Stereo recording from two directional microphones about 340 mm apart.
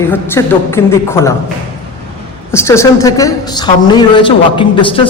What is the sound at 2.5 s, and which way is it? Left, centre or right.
A woman's voice, centre.